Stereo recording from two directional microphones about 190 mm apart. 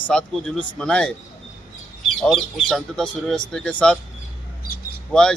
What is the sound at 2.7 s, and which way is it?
Speech, centre (ahead or behind).